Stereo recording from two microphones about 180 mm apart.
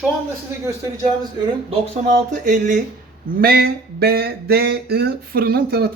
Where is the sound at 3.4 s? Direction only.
55° right (ahead or behind).